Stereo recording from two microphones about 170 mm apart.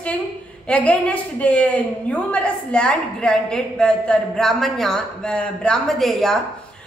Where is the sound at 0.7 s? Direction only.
10° left (ahead or behind).